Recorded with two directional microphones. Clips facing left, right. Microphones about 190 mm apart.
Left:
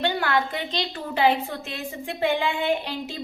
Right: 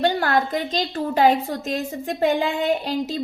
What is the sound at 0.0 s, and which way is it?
Speech, 40° right (ahead or behind).